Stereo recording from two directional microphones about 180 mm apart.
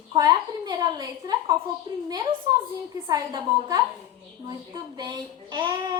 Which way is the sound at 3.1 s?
20° right (ahead or behind).